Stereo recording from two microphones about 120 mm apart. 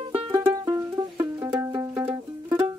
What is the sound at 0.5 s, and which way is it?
Music, 30° right (ahead or behind).